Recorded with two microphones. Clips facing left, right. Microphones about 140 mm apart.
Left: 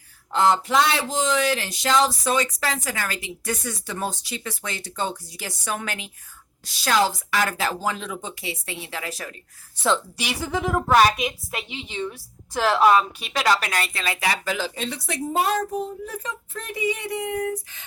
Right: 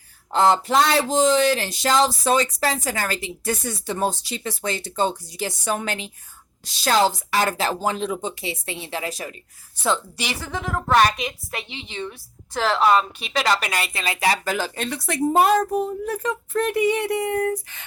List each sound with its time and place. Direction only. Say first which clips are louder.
0.3 s speech: right 2 dB; 35° right (ahead or behind)
9.8 s a woman's voice: even; centre (ahead or behind)
14.0 s speech: right 2 dB; 20° right (ahead or behind)
14.3 s a woman's voice: right 4 dB; 45° right (ahead or behind); by 17.8 s 65° right (ahead or behind)